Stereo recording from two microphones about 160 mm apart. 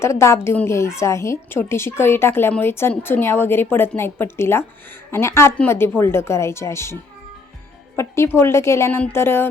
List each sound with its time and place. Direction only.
0.0 s a woman's voice: 15° left (ahead or behind)
7.9 s a woman's voice: 15° left (ahead or behind)